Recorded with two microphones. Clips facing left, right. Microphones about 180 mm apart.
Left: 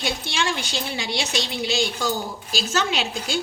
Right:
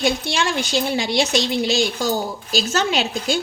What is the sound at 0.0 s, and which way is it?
A woman's voice, 45° right (ahead or behind).